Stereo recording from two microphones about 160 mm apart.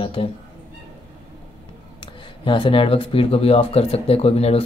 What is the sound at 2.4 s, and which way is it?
Speech, 30° left (ahead or behind).